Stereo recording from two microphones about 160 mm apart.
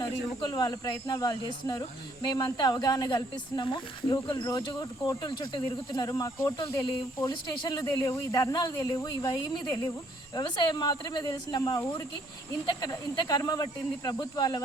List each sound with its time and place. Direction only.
0.0 s speech: 25° left (ahead or behind)